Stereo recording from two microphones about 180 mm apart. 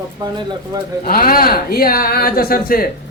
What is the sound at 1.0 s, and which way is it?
Speech, 55° left (ahead or behind).